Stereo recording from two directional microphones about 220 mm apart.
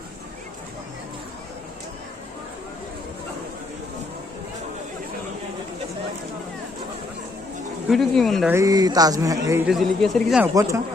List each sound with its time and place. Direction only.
7.9 s speech: centre (ahead or behind)
8.5 s speech: 15° right (ahead or behind)
9.6 s speech: centre (ahead or behind)
10.4 s speech: 15° right (ahead or behind)